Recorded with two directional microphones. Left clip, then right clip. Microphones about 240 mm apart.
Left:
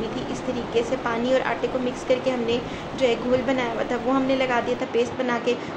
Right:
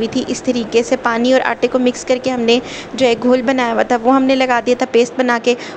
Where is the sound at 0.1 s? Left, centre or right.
Right.